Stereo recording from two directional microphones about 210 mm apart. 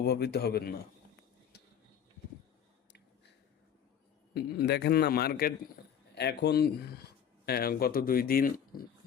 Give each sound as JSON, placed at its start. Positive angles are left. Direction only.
{"t": 0.0, "sound": "a man's voice", "side_deg": 50}
{"t": 4.4, "sound": "a man's voice", "side_deg": 50}